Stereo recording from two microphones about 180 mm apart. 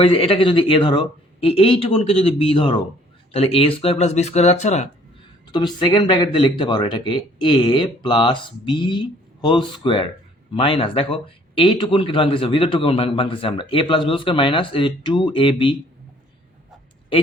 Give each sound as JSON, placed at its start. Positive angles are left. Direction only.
{"t": 0.0, "sound": "speech", "side_deg": 30}
{"t": 5.5, "sound": "a man's voice", "side_deg": 25}